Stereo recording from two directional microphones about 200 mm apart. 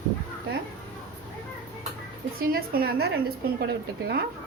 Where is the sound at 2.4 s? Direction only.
50° right (ahead or behind).